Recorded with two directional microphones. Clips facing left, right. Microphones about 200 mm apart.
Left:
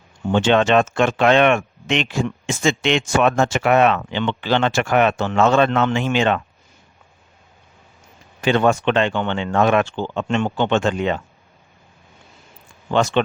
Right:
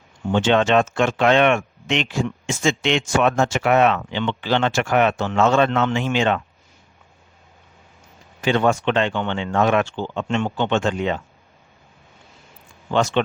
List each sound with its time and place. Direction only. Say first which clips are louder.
0.3 s speech: left 1 dB; 60° left (ahead or behind)
8.4 s speech: left 2 dB; 60° left (ahead or behind)
12.9 s speech: left 2 dB; 60° left (ahead or behind)